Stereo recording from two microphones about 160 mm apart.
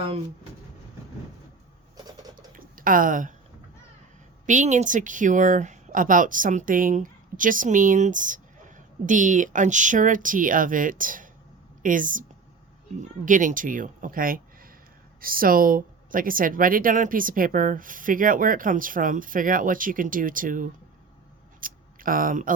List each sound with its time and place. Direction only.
2.3 s typing: 60° right (ahead or behind)
4.4 s a woman's voice: 50° right (ahead or behind)